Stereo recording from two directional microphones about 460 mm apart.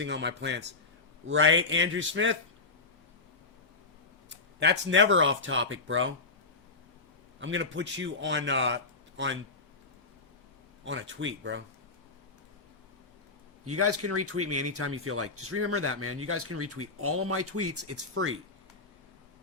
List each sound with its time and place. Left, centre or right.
0.0 s speech: right
4.3 s speech: right
7.3 s speech: right
10.8 s speech: right
13.7 s speech: right